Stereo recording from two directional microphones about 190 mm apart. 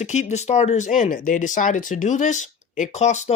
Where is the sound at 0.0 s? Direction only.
40° left (ahead or behind).